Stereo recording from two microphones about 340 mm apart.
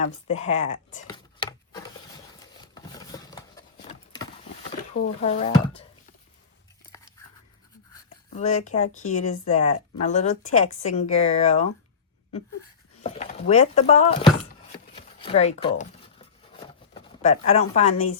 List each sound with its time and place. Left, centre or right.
0.0 s speech: centre
1.1 s wood: centre
2.7 s horse: centre
4.9 s speech: centre
8.3 s speech: left
13.0 s speech: centre
14.9 s a sound: centre
16.9 s speech: centre